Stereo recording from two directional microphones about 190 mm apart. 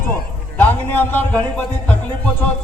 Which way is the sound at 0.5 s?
10° left (ahead or behind).